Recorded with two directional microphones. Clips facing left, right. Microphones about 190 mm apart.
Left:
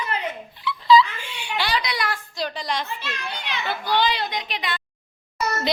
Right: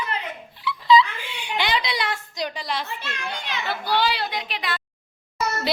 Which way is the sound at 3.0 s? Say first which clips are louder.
Even; 45° right (ahead or behind).